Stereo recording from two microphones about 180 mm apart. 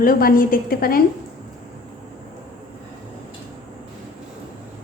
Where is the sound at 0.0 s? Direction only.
55° left (ahead or behind).